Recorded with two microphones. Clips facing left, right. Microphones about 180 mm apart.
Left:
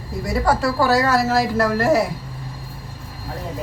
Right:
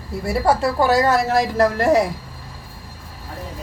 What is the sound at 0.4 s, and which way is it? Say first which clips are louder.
A woman's voice: right 1 dB; 20° right (ahead or behind).